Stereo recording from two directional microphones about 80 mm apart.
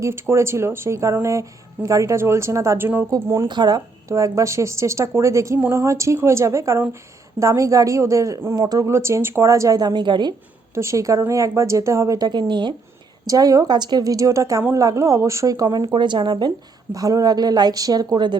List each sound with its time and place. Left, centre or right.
0.0 s speech: right
3.4 s speech: right
4.1 s speech: right
8.5 s speech: right
8.8 s speech: right
9.8 s a woman's voice: right
10.8 s speech: right
12.3 s a woman's voice: right
13.2 s speech: right
16.9 s speech: right